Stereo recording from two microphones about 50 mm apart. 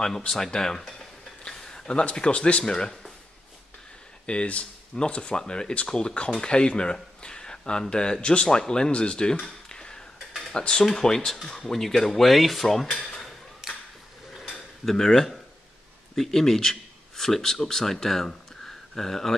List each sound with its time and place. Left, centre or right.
0.3 s speech: centre
4.3 s speech: left; by 12.8 s centre
13.6 s a sound: centre
14.9 s speech: centre